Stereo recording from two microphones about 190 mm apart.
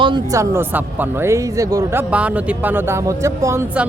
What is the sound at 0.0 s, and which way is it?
Speech, 20° right (ahead or behind).